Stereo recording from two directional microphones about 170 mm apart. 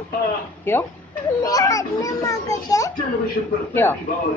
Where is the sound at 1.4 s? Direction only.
20° left (ahead or behind).